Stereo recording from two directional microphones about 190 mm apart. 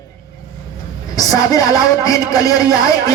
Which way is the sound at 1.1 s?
20° left (ahead or behind).